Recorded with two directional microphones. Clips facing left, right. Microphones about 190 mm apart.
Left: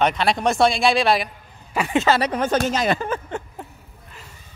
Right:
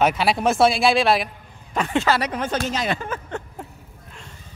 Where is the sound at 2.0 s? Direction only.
25° left (ahead or behind).